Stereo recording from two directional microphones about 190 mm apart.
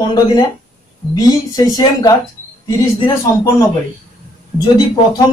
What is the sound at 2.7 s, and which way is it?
Speech, 25° left (ahead or behind).